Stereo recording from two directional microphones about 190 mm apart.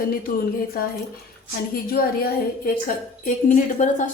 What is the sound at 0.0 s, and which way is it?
Speech, 50° left (ahead or behind).